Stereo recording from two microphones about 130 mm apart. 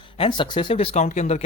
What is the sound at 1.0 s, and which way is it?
Speech, 65° left (ahead or behind).